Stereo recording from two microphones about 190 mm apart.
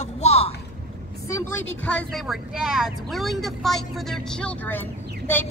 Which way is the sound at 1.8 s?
5° left (ahead or behind).